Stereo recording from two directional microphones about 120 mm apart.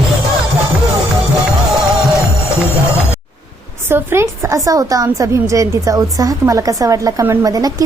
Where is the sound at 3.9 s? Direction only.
20° right (ahead or behind).